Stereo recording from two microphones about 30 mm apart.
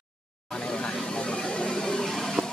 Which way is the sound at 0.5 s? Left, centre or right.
Left.